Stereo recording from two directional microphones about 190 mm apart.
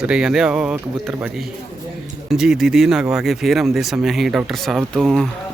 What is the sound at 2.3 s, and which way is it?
Speech, centre (ahead or behind).